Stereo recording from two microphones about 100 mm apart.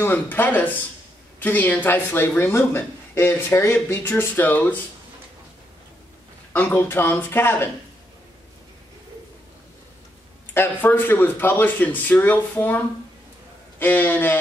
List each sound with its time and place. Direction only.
0.0 s speech: 20° left (ahead or behind)
6.5 s speech: 20° left (ahead or behind)
10.5 s speech: 20° left (ahead or behind)